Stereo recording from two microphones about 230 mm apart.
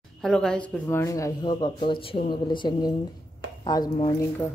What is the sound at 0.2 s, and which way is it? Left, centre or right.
Speech, centre.